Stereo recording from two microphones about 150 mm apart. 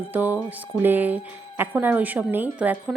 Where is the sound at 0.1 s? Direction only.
10° right (ahead or behind).